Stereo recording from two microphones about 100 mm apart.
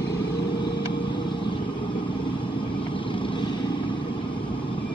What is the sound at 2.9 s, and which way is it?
Vehicle, 60° left (ahead or behind).